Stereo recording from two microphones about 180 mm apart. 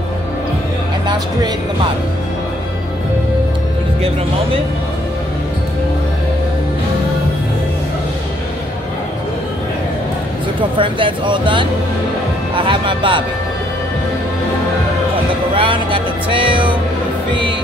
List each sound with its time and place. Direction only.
1.0 s speech: 25° right (ahead or behind)
10.8 s speech: 30° right (ahead or behind)
15.5 s music: 30° right (ahead or behind)